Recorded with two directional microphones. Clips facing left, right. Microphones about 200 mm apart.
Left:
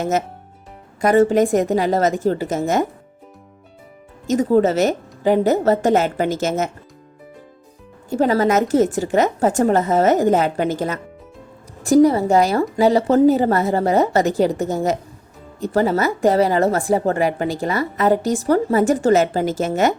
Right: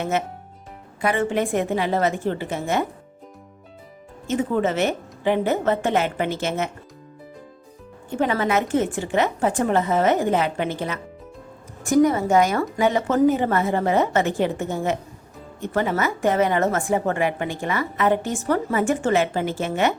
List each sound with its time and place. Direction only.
0.0 s a woman's voice: 40° left (ahead or behind)
4.3 s a woman's voice: 35° left (ahead or behind)
8.1 s a woman's voice: 40° left (ahead or behind)